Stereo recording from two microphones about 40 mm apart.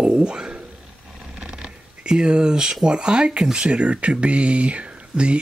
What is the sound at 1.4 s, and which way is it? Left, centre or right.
Speech, right.